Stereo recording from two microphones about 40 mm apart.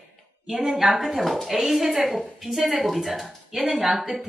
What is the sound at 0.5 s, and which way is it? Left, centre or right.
A woman's voice, centre.